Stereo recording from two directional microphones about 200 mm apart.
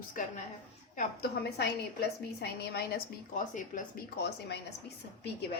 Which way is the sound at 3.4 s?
40° left (ahead or behind).